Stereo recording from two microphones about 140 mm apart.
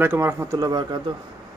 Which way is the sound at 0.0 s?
15° right (ahead or behind).